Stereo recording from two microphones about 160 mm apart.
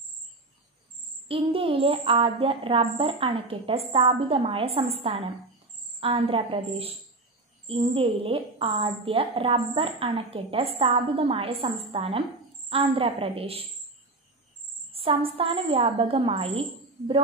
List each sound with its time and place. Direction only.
1.3 s a woman's voice: 35° right (ahead or behind)
14.9 s a woman's voice: 35° right (ahead or behind)